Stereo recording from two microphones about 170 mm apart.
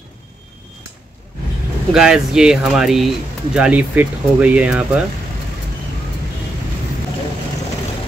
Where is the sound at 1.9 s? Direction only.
5° right (ahead or behind).